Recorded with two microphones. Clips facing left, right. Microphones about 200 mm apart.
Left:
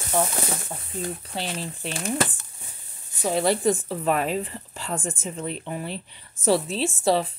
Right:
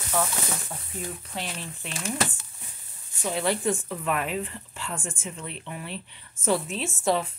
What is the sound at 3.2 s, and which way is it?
Speech, 40° left (ahead or behind).